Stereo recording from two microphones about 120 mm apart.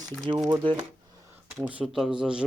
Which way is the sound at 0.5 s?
45° right (ahead or behind).